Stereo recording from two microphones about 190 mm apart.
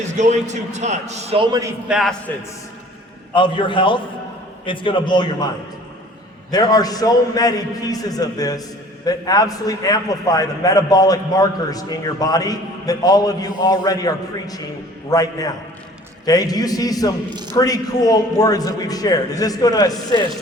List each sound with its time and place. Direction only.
0.2 s a man's voice: 40° right (ahead or behind)
1.9 s a man's voice: centre (ahead or behind)
3.3 s a man's voice: 25° left (ahead or behind)
6.5 s a man's voice: 20° left (ahead or behind)
17.2 s a man's voice: 25° right (ahead or behind)
17.6 s a man's voice: 20° left (ahead or behind)